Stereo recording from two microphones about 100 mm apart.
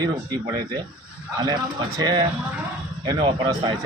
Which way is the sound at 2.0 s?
45° right (ahead or behind).